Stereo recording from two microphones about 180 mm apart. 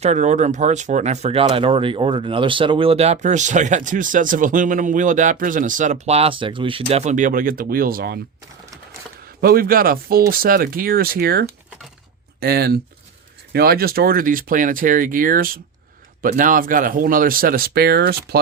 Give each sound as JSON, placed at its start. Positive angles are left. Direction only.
{"t": 0.0, "sound": "speech", "side_deg": -40}
{"t": 9.4, "sound": "speech", "side_deg": -55}